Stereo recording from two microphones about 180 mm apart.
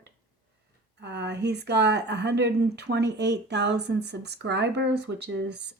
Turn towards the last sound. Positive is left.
turn(degrees=-70)  # may be behind; listen again after turning